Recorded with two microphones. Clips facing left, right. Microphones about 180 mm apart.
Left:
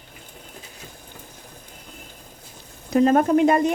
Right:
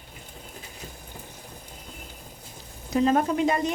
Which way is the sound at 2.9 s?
55° left (ahead or behind).